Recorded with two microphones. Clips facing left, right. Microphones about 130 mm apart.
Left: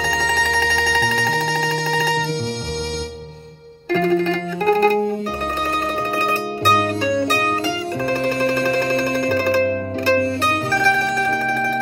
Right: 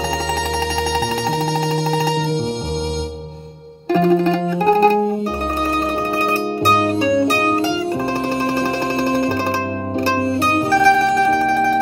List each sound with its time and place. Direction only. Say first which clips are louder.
0.4 s mandolin: right 1 dB; 30° right (ahead or behind)
3.9 s music: right 3 dB; 30° right (ahead or behind)
6.6 s music: right 2 dB; 30° right (ahead or behind)
10.5 s music: right 6 dB; 30° right (ahead or behind)